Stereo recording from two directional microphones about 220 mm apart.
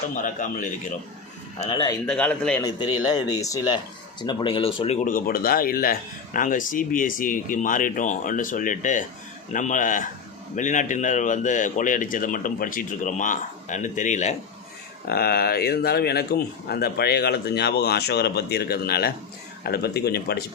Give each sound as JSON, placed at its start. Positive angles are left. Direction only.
{"t": 0.2, "sound": "speech", "side_deg": 35}
{"t": 2.0, "sound": "a man's voice", "side_deg": 5}
{"t": 2.6, "sound": "speech", "side_deg": 20}
{"t": 5.0, "sound": "speech", "side_deg": 40}
{"t": 15.0, "sound": "speech", "side_deg": 45}